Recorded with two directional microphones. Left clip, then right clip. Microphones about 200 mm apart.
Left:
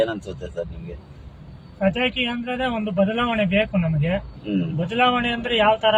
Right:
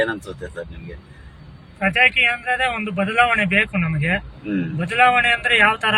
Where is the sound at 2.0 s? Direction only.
15° left (ahead or behind).